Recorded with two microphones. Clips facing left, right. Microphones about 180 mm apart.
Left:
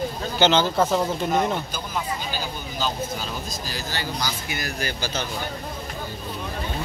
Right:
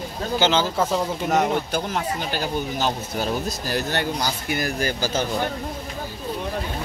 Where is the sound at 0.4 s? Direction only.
5° right (ahead or behind).